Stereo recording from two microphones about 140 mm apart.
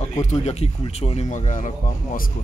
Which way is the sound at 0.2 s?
55° left (ahead or behind).